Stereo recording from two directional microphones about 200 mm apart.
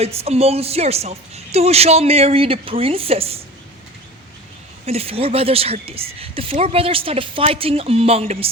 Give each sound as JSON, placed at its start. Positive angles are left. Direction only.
{"t": 0.0, "sound": "speech", "side_deg": -30}
{"t": 4.9, "sound": "speech", "side_deg": -30}